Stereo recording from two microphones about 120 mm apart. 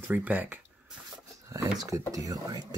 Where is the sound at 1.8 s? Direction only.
30° right (ahead or behind).